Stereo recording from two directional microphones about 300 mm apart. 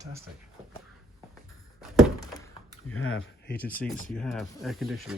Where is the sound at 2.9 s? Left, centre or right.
Left.